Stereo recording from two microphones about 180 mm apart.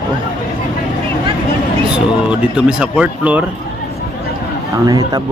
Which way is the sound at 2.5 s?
5° right (ahead or behind).